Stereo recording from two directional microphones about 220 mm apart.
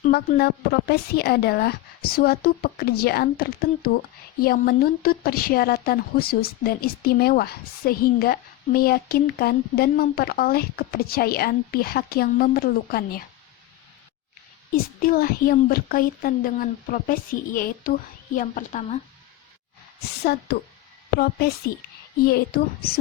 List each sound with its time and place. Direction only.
0.0 s a woman's voice: 45° left (ahead or behind)
15.0 s speech: 40° left (ahead or behind)
20.2 s a woman's voice: 45° left (ahead or behind)
22.2 s a woman's voice: 45° left (ahead or behind)